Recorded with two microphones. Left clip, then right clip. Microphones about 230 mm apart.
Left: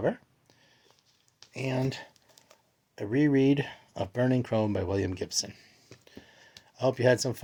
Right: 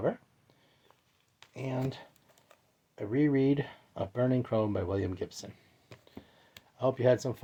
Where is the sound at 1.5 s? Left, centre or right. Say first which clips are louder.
Left 5 dB; left.